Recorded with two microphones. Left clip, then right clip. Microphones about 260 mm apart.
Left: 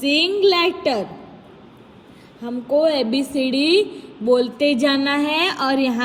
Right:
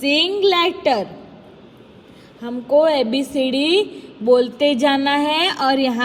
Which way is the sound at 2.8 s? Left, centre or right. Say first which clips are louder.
Right 2 dB; centre.